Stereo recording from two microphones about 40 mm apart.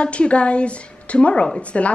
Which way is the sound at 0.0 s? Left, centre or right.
Left.